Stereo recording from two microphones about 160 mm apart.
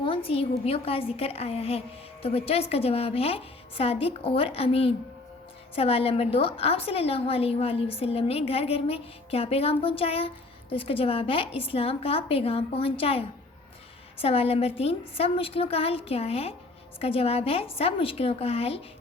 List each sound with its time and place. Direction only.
0.0 s a woman's voice: 35° left (ahead or behind)